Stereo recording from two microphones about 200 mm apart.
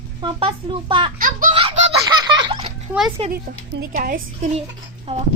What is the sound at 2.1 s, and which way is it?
Baby laughter, 20° right (ahead or behind).